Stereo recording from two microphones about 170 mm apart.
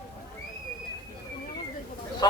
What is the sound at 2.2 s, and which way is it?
Speech, 20° left (ahead or behind).